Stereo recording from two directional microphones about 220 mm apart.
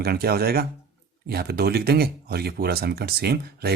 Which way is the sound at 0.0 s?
45° right (ahead or behind).